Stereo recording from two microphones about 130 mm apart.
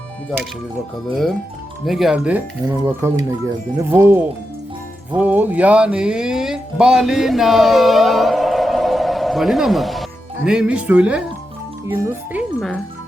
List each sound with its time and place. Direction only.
1.8 s speech: centre (ahead or behind)
2.6 s speech: 25° right (ahead or behind)
12.5 s speech: 5° left (ahead or behind)